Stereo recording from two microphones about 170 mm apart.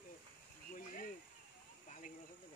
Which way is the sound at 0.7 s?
50° left (ahead or behind).